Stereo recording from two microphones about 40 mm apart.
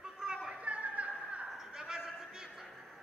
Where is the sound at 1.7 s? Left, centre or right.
Centre.